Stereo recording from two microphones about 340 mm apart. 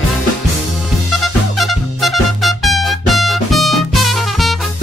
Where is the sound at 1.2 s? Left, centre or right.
Centre.